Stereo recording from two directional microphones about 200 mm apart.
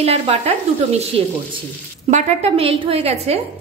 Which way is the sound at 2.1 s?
30° right (ahead or behind).